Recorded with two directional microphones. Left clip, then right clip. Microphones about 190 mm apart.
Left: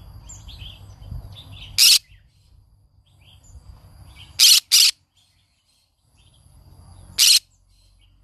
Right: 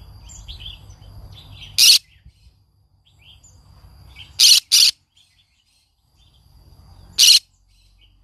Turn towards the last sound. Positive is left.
turn(degrees=15)  # may be behind; listen again after turning